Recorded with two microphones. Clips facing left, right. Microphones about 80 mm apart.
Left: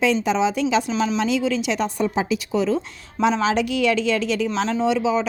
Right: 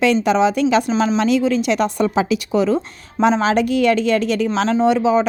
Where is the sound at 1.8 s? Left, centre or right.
Right.